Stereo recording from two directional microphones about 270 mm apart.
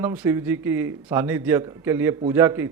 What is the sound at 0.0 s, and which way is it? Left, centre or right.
Speech, centre.